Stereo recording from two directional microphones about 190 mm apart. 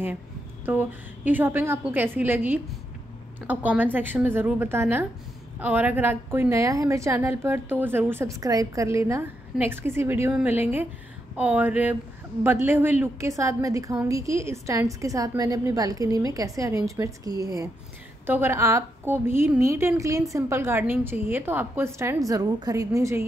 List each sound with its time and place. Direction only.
0.7 s a woman's voice: 10° right (ahead or behind)